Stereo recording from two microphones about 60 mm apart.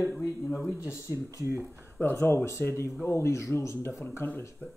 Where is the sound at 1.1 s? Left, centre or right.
Right.